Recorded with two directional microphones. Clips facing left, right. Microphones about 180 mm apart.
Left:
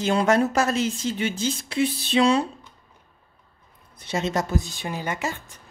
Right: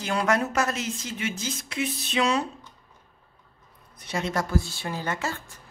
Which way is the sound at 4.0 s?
25° left (ahead or behind).